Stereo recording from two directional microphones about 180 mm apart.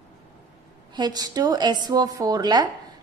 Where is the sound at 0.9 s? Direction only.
25° right (ahead or behind).